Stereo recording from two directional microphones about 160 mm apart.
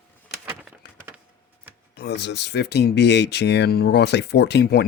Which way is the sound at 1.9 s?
90° left.